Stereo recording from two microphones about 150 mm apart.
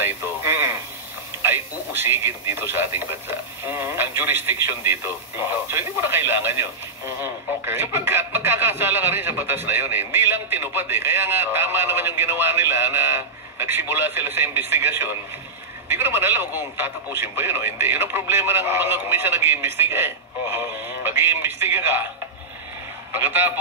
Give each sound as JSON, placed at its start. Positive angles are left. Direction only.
{"t": 0.0, "sound": "radio", "side_deg": -15}
{"t": 1.4, "sound": "speech", "side_deg": -15}
{"t": 23.1, "sound": "speech", "side_deg": -15}